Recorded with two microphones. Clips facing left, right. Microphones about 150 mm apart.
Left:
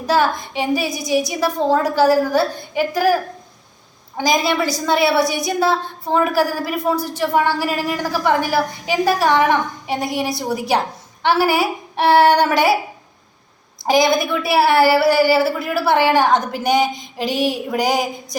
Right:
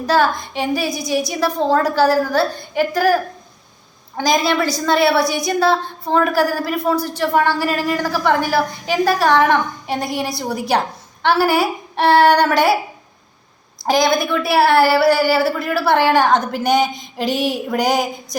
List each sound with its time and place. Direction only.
0.0 s a woman's voice: 15° left (ahead or behind)
4.2 s a woman's voice: 15° left (ahead or behind)
13.8 s a woman's voice: 15° left (ahead or behind)